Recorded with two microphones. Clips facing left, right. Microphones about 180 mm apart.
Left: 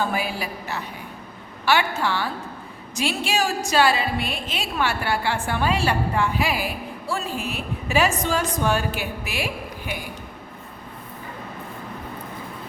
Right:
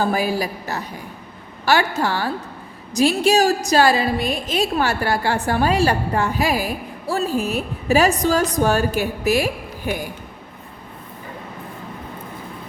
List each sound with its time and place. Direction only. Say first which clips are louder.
0.0 s a woman's voice: right 5 dB; 40° right (ahead or behind)